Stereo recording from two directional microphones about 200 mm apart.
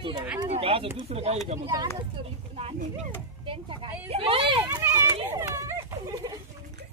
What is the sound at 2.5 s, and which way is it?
Speech, 30° right (ahead or behind).